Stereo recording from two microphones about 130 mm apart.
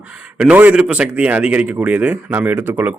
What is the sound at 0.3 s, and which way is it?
Speech, 10° right (ahead or behind).